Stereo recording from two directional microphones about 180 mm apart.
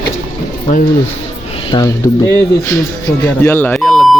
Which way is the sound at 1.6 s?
20° left (ahead or behind).